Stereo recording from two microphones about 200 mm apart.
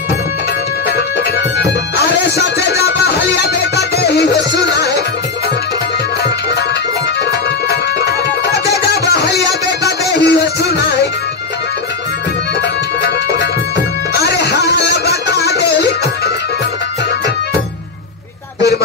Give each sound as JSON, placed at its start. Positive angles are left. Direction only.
{"t": 1.6, "sound": "music", "side_deg": 55}
{"t": 8.0, "sound": "music", "side_deg": 55}
{"t": 14.1, "sound": "music", "side_deg": 55}